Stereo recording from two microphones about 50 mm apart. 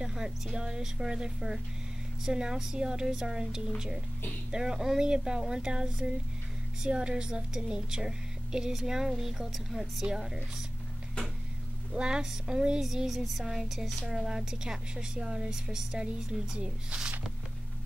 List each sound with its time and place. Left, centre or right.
0.0 s speech: centre
11.9 s speech: centre